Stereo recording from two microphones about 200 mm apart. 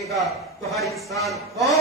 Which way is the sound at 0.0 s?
Centre (ahead or behind).